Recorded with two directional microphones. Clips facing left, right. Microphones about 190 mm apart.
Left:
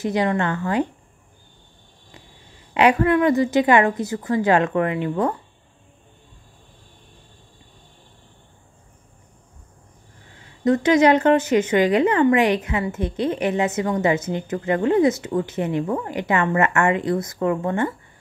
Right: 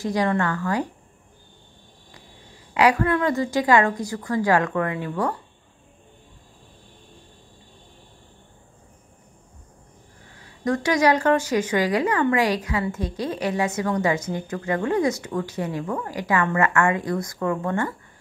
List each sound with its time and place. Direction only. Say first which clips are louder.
0.0 s speech: left 1 dB; 20° left (ahead or behind)
2.7 s speech: left 3 dB; 25° left (ahead or behind)
10.6 s speech: left 5 dB; 20° left (ahead or behind)